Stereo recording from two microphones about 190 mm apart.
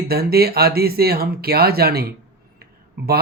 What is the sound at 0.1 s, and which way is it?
Speech, 55° right (ahead or behind).